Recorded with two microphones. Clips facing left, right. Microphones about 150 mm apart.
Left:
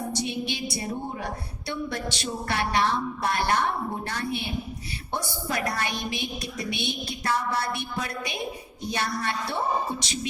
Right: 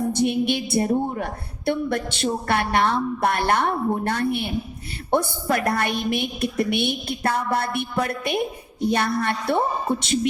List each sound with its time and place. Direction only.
0.1 s a woman's voice: 55° right (ahead or behind)